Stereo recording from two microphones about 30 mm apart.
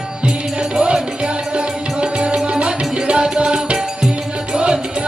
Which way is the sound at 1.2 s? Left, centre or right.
Right.